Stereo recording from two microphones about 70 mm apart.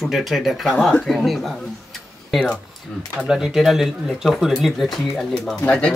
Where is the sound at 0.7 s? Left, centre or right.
Centre.